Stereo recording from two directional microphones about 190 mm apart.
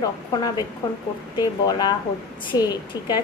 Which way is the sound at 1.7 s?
20° left (ahead or behind).